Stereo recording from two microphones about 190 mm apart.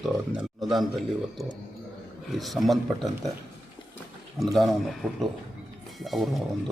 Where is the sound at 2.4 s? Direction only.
Centre (ahead or behind).